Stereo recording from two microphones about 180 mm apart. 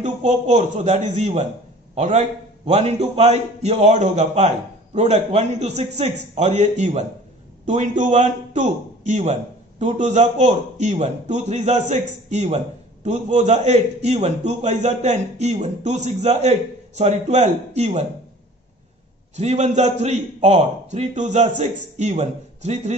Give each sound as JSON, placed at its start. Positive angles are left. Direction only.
{"t": 0.0, "sound": "a man's voice", "side_deg": -40}
{"t": 19.3, "sound": "a man's voice", "side_deg": -40}